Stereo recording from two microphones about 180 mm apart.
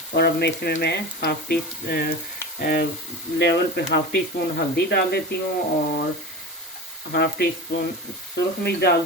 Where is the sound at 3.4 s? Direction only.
65° left (ahead or behind).